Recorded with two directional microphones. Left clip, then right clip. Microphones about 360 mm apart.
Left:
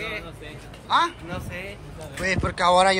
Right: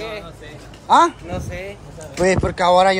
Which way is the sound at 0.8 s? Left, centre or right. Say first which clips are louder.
Right 8 dB; centre.